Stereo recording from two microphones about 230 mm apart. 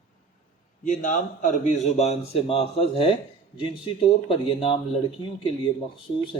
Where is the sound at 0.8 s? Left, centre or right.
Left.